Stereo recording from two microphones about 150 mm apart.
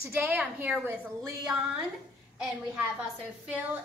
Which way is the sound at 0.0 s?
10° right (ahead or behind).